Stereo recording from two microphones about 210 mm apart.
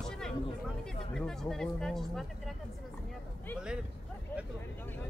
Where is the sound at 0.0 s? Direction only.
5° left (ahead or behind).